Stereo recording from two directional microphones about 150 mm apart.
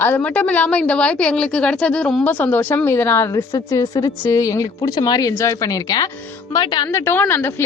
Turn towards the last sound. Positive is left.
turn(degrees=15)  # may be behind; listen again after turning